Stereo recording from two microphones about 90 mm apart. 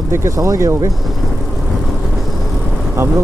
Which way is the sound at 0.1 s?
35° right (ahead or behind).